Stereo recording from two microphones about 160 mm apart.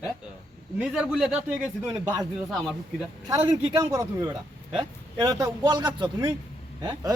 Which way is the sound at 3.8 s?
20° right (ahead or behind).